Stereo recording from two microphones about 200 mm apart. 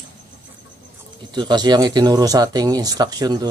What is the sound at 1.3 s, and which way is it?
Speech, 20° right (ahead or behind).